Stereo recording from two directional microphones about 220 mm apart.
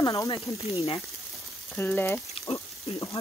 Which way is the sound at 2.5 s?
25° left (ahead or behind).